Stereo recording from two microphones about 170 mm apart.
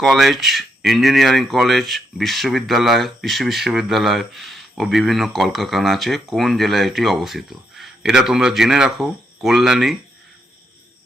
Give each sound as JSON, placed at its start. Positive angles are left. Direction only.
{"t": 0.0, "sound": "speech", "side_deg": 0}